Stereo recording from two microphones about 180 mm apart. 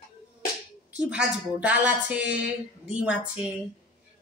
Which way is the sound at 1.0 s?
5° right (ahead or behind).